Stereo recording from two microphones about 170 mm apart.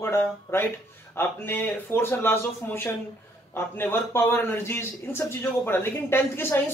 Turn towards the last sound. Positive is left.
turn(degrees=15)  # may be behind; listen again after turning